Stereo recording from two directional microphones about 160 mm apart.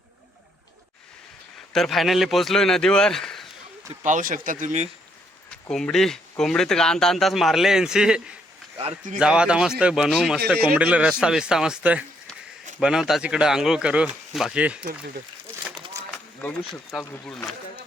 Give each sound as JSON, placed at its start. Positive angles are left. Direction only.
{"t": 1.7, "sound": "speech", "side_deg": 0}
{"t": 4.0, "sound": "speech", "side_deg": -55}
{"t": 5.6, "sound": "a man's voice", "side_deg": 5}
{"t": 16.9, "sound": "speech", "side_deg": -5}